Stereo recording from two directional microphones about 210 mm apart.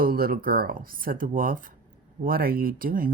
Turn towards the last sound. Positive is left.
turn(degrees=-40)  # may be behind; listen again after turning